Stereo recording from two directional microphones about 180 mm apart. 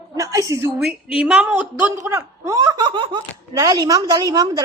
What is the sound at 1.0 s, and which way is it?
Speech, 5° right (ahead or behind).